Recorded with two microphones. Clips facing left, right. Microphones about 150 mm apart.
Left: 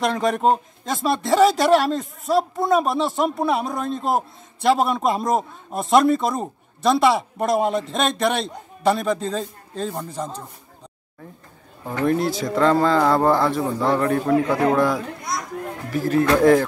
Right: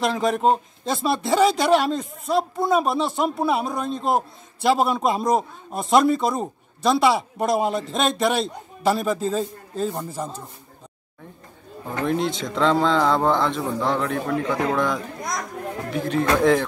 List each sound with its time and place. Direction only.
0.0 s speech: centre (ahead or behind)
12.2 s speech: 25° right (ahead or behind)
12.4 s speech: 5° left (ahead or behind)
16.1 s speech: 5° left (ahead or behind)